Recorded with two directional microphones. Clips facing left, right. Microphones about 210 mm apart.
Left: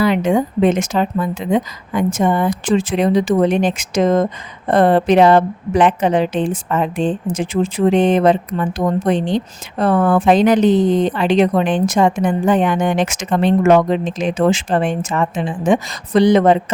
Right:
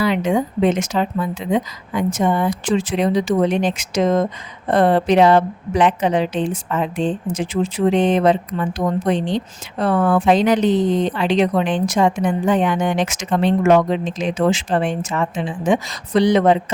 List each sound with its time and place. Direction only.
0.0 s a woman's voice: 50° left (ahead or behind)